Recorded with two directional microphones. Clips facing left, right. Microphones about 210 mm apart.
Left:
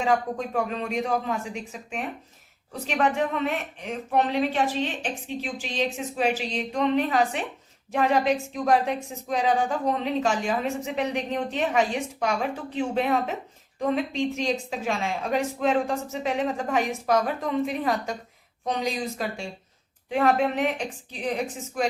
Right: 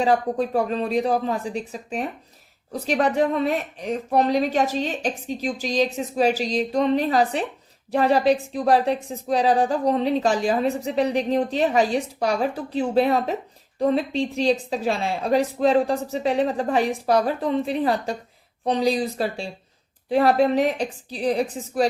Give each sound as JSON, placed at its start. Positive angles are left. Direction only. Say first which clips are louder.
{"t": 0.0, "sound": "speech", "louder": "right 4 dB", "side_deg": -35}